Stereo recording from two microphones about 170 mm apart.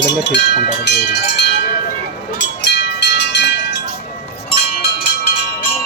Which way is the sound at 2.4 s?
90° left.